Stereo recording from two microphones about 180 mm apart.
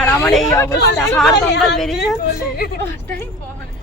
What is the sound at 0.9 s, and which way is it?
Speech, centre (ahead or behind).